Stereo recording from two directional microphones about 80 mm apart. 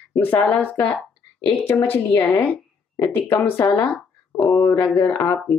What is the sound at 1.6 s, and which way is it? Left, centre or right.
A woman's voice, left.